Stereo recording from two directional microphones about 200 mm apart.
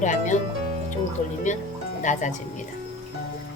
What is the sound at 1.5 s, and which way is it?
Speech, 40° left (ahead or behind).